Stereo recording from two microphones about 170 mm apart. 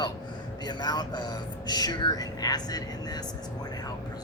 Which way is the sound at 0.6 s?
25° left (ahead or behind).